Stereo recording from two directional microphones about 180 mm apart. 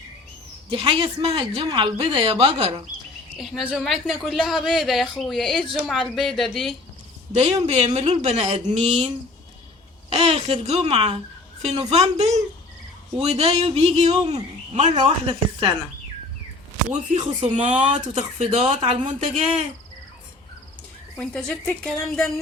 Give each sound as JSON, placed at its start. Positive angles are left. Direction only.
{"t": 0.7, "sound": "speech", "side_deg": -30}
{"t": 3.3, "sound": "speech", "side_deg": 0}
{"t": 7.3, "sound": "speech", "side_deg": -35}
{"t": 10.1, "sound": "speech", "side_deg": -35}
{"t": 17.4, "sound": "speech", "side_deg": -40}
{"t": 21.2, "sound": "speech", "side_deg": 10}